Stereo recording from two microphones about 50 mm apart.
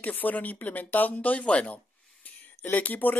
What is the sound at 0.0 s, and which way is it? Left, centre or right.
Speech, left.